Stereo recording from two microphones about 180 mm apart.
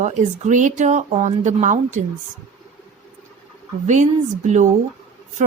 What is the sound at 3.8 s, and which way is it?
Speech, 40° right (ahead or behind).